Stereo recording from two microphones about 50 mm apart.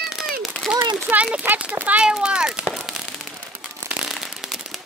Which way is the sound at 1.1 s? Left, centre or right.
Right.